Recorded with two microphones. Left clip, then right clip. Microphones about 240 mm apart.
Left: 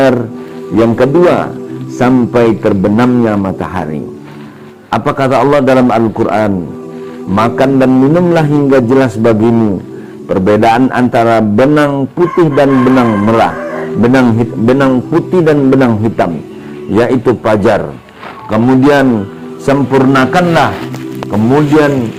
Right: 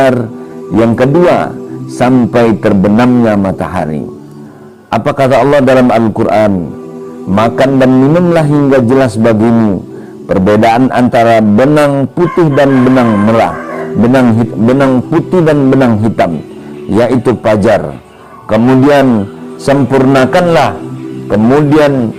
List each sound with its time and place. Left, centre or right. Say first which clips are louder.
0.8 s a man's voice: even; right
4.9 s a man's voice: right 2 dB; right